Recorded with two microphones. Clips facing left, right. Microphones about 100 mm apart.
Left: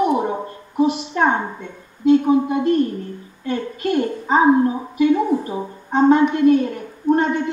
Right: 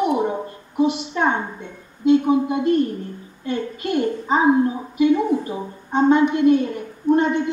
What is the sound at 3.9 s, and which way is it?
A woman's voice, 40° left (ahead or behind).